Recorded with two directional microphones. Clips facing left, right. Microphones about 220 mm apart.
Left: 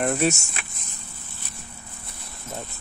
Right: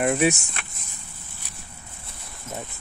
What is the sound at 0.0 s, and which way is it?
Speech, 10° right (ahead or behind).